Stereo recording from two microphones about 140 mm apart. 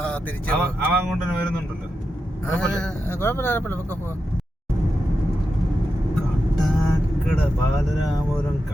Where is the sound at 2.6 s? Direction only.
5° left (ahead or behind).